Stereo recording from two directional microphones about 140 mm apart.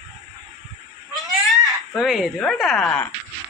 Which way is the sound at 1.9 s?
Centre (ahead or behind).